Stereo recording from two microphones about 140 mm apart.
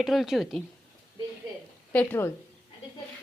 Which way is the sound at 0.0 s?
Centre (ahead or behind).